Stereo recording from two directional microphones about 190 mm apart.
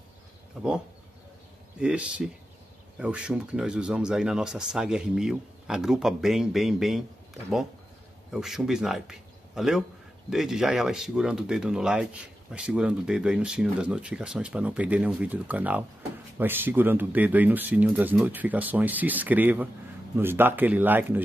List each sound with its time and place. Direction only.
0.6 s speech: centre (ahead or behind)
1.8 s speech: 5° right (ahead or behind)
8.3 s speech: centre (ahead or behind)